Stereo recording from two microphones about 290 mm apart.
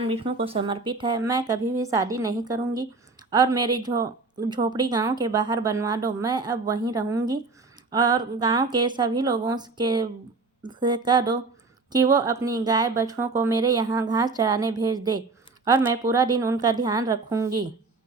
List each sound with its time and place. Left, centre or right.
0.0 s a woman's voice: centre